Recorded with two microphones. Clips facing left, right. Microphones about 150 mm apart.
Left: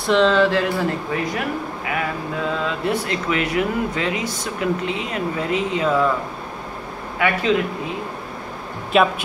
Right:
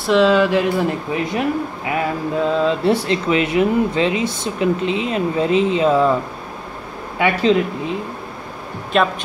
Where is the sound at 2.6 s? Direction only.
30° right (ahead or behind).